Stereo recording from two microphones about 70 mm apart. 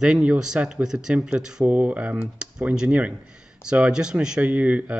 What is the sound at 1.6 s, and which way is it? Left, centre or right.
Speech, right.